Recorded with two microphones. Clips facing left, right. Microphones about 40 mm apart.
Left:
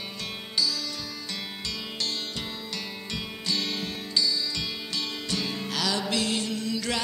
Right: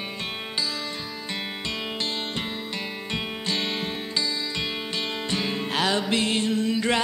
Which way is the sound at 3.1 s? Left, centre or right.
Right.